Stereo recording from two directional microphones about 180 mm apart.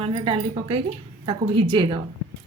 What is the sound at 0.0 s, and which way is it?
A woman's voice, 30° right (ahead or behind).